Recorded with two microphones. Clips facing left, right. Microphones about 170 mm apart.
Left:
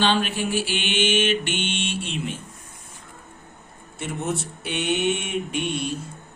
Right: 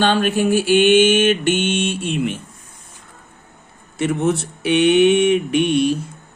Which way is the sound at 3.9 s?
80° right.